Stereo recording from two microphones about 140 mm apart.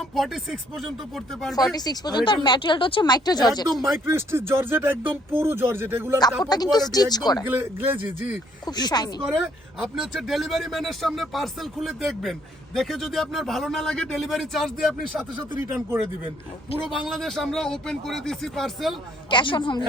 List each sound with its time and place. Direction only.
0.2 s speech: centre (ahead or behind)
1.5 s speech: 25° left (ahead or behind)
3.8 s speech: centre (ahead or behind)
4.0 s speech: 20° right (ahead or behind)
6.4 s speech: 30° left (ahead or behind)
7.4 s speech: 15° right (ahead or behind)
8.6 s a man's voice: 30° left (ahead or behind)
9.8 s speech: centre (ahead or behind)
15.6 s speech: 15° right (ahead or behind)
17.1 s speech: centre (ahead or behind)
19.3 s a man's voice: 35° left (ahead or behind)